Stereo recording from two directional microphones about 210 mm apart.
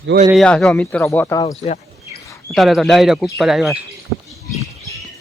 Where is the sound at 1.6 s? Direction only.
30° left (ahead or behind).